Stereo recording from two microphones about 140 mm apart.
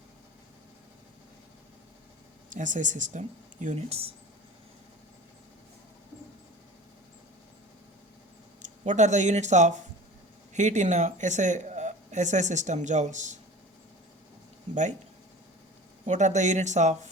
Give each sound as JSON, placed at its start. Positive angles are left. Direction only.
{"t": 2.5, "sound": "speech", "side_deg": -65}
{"t": 8.6, "sound": "speech", "side_deg": -60}
{"t": 16.0, "sound": "speech", "side_deg": -60}